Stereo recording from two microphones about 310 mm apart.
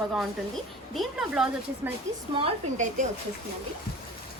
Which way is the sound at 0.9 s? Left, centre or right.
Centre.